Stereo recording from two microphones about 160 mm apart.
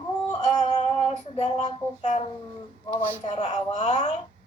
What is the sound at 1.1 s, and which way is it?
A woman's voice, 45° left (ahead or behind).